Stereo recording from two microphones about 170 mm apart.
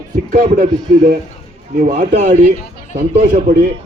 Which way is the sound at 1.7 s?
50° right (ahead or behind).